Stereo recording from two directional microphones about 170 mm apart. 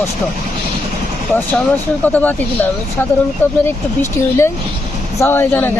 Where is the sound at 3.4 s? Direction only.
10° left (ahead or behind).